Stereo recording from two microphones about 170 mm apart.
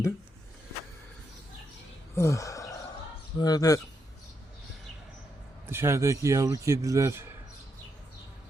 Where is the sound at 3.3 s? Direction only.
25° left (ahead or behind).